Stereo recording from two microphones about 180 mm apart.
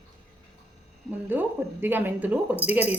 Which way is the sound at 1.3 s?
10° right (ahead or behind).